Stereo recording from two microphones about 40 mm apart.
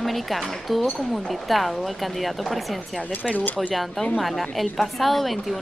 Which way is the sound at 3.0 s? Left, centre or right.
Left.